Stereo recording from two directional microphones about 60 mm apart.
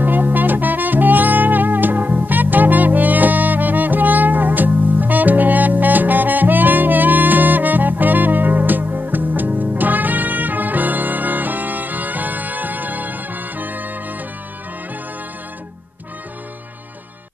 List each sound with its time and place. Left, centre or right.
0.0 s music: right